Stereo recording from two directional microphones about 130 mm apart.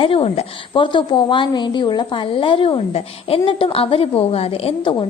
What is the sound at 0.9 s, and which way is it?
A woman's voice, 40° left (ahead or behind).